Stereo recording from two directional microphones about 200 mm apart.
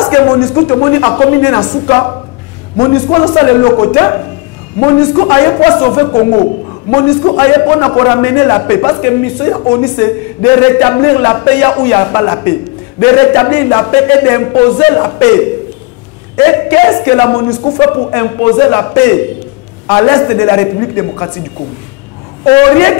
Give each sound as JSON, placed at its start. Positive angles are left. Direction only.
{"t": 0.0, "sound": "a woman's voice", "side_deg": 20}
{"t": 22.4, "sound": "a woman's voice", "side_deg": 15}